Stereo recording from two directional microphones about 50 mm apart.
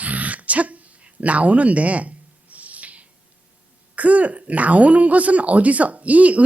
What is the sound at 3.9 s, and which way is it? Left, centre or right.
Speech, right.